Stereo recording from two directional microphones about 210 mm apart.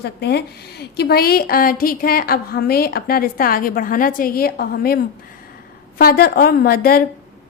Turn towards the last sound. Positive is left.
turn(degrees=45)  # may be behind; listen again after turning